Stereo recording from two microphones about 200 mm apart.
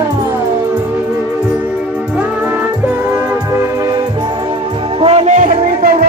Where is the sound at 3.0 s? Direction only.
15° right (ahead or behind).